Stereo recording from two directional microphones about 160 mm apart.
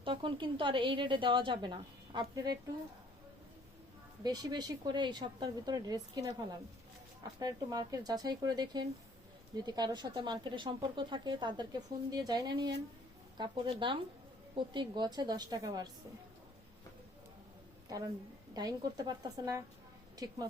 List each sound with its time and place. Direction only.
0.0 s a woman's voice: 30° right (ahead or behind)
4.2 s speech: 25° right (ahead or behind)
7.3 s a woman's voice: 25° right (ahead or behind)
17.8 s speech: 25° right (ahead or behind)